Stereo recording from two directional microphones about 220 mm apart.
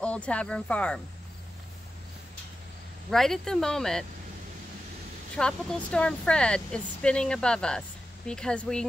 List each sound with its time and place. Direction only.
0.0 s speech: 5° left (ahead or behind)
3.1 s speech: centre (ahead or behind)
5.3 s speech: 5° left (ahead or behind)